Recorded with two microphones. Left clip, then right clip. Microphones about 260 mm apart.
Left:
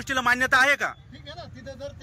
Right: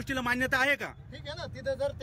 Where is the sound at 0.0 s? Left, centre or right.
Centre.